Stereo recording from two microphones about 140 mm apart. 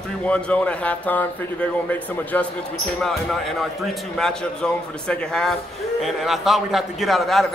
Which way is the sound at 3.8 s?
5° left (ahead or behind).